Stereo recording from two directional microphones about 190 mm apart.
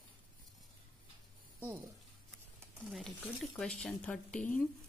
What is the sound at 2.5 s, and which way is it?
Speech, 5° right (ahead or behind).